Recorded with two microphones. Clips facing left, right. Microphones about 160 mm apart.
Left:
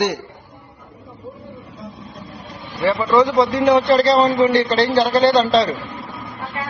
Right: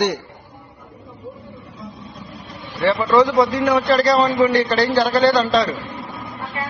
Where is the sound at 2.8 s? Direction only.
10° left (ahead or behind).